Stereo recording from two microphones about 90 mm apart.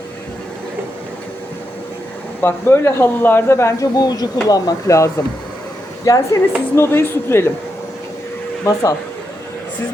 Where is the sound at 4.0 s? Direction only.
45° left (ahead or behind).